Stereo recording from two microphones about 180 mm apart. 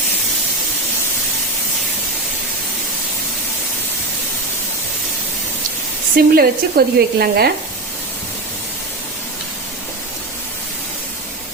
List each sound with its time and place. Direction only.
6.1 s speech: 55° right (ahead or behind)